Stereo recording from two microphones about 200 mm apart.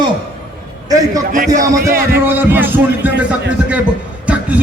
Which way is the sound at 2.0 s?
50° right (ahead or behind).